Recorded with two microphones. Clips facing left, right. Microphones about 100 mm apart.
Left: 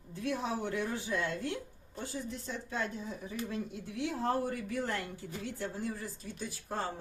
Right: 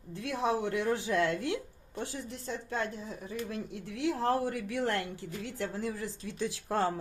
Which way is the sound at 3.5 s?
80° right.